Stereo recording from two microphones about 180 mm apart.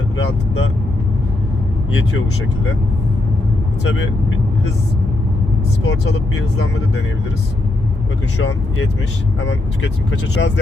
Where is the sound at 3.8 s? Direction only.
90° left.